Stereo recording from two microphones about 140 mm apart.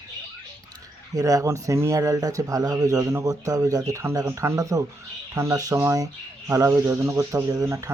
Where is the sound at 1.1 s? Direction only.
25° right (ahead or behind).